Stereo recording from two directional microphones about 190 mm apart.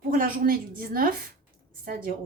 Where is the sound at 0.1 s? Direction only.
50° right (ahead or behind).